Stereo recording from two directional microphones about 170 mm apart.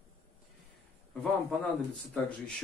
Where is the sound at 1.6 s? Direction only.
5° left (ahead or behind).